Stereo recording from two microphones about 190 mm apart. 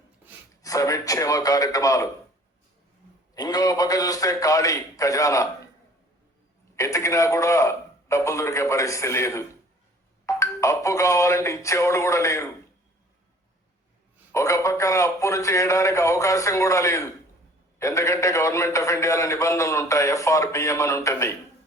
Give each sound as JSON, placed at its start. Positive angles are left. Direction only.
{"t": 0.6, "sound": "a man's voice", "side_deg": 20}
{"t": 3.3, "sound": "a man's voice", "side_deg": 20}
{"t": 6.7, "sound": "a man's voice", "side_deg": 15}
{"t": 14.3, "sound": "a man's voice", "side_deg": 15}